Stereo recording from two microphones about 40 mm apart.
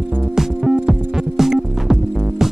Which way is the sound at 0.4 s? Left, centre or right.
Centre.